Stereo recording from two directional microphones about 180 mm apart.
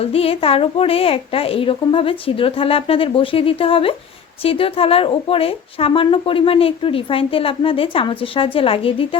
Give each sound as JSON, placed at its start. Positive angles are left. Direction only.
{"t": 0.0, "sound": "a woman's voice", "side_deg": 30}